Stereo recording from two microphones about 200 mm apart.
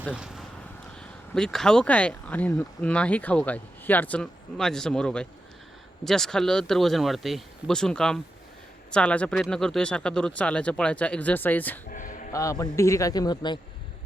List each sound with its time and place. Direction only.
0.1 s speech: 5° right (ahead or behind)
11.9 s a sound: 40° left (ahead or behind)
12.3 s a man's voice: 15° left (ahead or behind)